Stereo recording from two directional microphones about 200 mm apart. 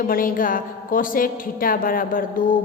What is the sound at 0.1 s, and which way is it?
A woman's voice, 45° left (ahead or behind).